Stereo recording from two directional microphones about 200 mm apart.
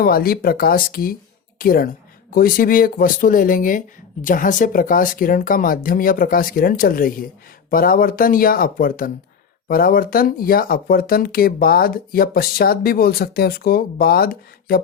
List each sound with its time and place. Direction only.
0.0 s speech: 50° left (ahead or behind)